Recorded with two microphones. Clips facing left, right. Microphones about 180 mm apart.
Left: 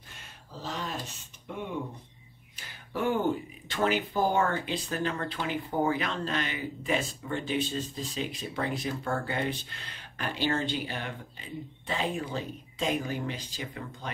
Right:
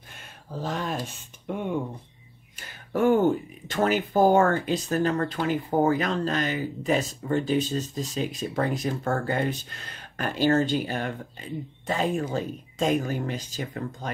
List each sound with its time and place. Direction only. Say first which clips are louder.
0.5 s speech: right 6 dB; 50° right (ahead or behind)
2.5 s a sound: right 7 dB; 45° right (ahead or behind)
3.6 s speech: right 4 dB; 45° right (ahead or behind)